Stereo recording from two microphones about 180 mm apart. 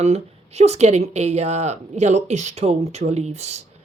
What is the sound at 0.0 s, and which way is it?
Speech, 35° right (ahead or behind).